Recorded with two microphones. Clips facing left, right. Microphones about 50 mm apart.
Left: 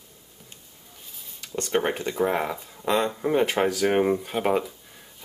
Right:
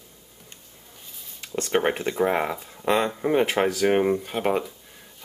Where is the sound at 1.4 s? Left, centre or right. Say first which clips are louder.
Right 2 dB; centre.